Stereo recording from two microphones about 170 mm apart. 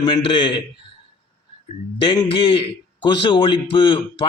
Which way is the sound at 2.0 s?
30° left (ahead or behind).